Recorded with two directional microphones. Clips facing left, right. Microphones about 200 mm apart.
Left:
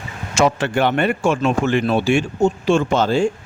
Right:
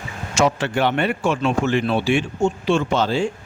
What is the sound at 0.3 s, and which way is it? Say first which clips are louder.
A man's voice: left 2 dB; 55° left (ahead or behind).